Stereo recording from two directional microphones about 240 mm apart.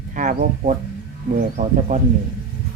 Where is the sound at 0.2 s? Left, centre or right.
Right.